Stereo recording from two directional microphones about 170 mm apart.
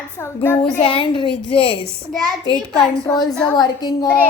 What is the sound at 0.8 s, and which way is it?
Speech, 30° left (ahead or behind).